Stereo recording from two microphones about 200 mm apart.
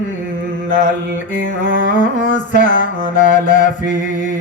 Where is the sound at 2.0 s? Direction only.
40° left (ahead or behind).